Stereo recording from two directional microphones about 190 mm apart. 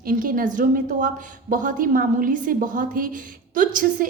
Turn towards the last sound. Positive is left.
turn(degrees=-45)  # may be behind; listen again after turning